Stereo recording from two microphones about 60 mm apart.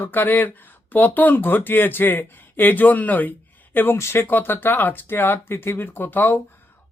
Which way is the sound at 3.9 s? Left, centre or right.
Left.